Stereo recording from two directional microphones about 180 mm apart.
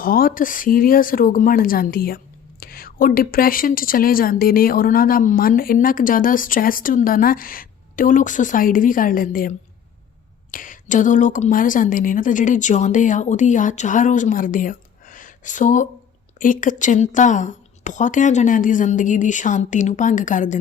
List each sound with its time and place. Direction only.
0.0 s speech: 55° left (ahead or behind)
10.5 s speech: 50° left (ahead or behind)